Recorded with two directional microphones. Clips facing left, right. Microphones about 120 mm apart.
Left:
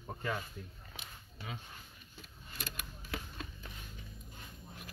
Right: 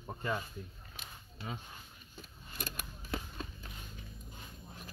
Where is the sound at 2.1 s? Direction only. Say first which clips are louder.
Right 3 dB; 45° right (ahead or behind).